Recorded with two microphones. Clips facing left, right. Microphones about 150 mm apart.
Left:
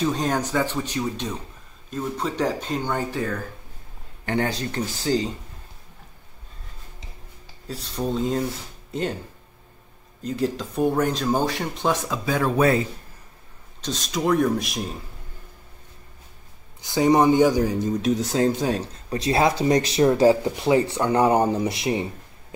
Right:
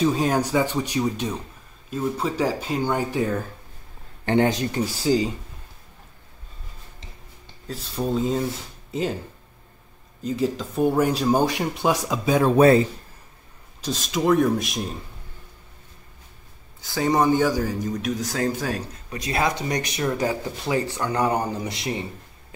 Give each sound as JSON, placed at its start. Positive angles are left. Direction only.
{"t": 0.0, "sound": "speech", "side_deg": -5}
{"t": 7.6, "sound": "speech", "side_deg": 0}
{"t": 10.2, "sound": "speech", "side_deg": 0}
{"t": 13.7, "sound": "speech", "side_deg": -5}
{"t": 16.8, "sound": "speech", "side_deg": 20}